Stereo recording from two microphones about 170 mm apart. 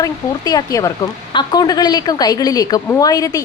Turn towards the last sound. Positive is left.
turn(degrees=20)  # may be behind; listen again after turning